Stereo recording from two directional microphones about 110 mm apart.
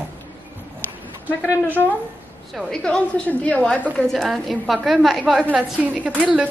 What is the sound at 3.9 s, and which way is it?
A woman's voice, centre (ahead or behind).